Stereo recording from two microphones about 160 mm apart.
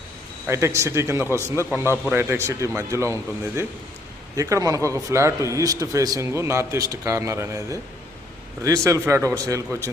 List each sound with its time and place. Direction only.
0.4 s a man's voice: 15° right (ahead or behind)